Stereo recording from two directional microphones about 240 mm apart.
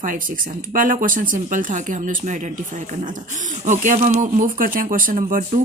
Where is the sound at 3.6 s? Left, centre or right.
Right.